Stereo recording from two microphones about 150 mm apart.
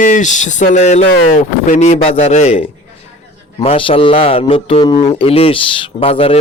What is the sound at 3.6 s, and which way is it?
A man's voice, 40° left (ahead or behind).